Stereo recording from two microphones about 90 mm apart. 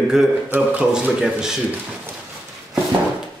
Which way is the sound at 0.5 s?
20° right (ahead or behind).